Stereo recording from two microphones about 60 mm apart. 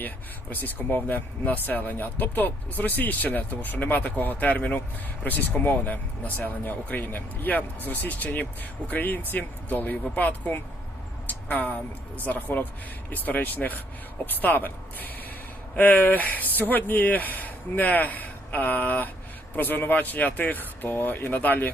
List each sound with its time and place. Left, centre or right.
0.5 s speech: left